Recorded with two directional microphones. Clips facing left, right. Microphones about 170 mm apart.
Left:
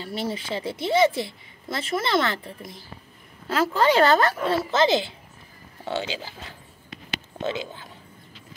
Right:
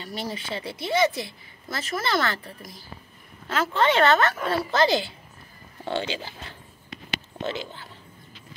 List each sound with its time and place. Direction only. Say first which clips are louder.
0.0 s a woman's voice: left 3 dB; 25° left (ahead or behind)
5.9 s speech: even; 5° left (ahead or behind)